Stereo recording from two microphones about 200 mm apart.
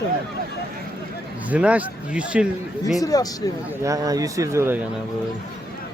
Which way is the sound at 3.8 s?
15° right (ahead or behind).